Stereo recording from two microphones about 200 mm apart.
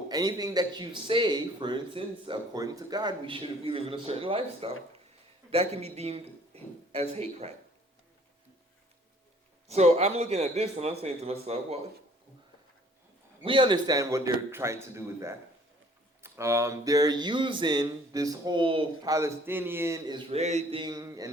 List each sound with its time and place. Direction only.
0.1 s speech: 20° right (ahead or behind)
9.6 s a man's voice: 30° right (ahead or behind)
13.4 s speech: 25° right (ahead or behind)
19.1 s speech: 10° right (ahead or behind)